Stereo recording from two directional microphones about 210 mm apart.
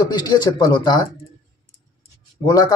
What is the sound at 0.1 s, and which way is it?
Speech, 20° left (ahead or behind).